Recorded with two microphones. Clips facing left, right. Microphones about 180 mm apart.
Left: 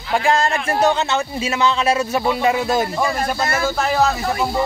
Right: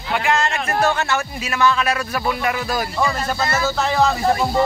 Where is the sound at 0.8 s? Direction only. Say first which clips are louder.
Left 3 dB; 20° left (ahead or behind).